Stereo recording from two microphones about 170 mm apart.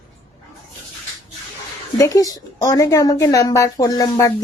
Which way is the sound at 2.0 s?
20° left (ahead or behind).